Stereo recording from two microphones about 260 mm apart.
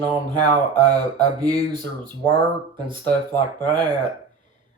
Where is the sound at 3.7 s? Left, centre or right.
Centre.